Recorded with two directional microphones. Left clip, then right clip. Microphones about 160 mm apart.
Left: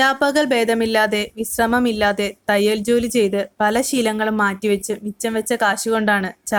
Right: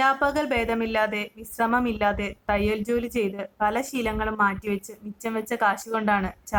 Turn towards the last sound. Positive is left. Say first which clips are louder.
# left 6 dB
turn(degrees=40)  # may be behind; listen again after turning